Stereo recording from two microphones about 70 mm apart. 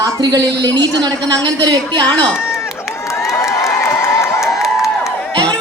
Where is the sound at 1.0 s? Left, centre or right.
Right.